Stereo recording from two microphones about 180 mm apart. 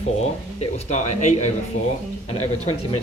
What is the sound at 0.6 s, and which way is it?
Speech, 40° left (ahead or behind).